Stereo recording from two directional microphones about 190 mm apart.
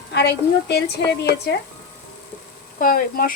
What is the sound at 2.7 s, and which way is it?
Speech, 50° left (ahead or behind).